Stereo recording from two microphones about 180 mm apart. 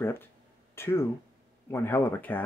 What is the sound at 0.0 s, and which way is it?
Speech, 10° left (ahead or behind).